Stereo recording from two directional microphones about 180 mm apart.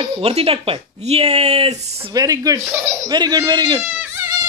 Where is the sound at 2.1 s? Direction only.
20° right (ahead or behind).